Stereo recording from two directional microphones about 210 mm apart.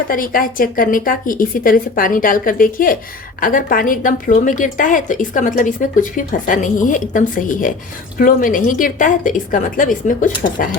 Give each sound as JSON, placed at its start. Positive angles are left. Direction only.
{"t": 0.1, "sound": "a woman's voice", "side_deg": 40}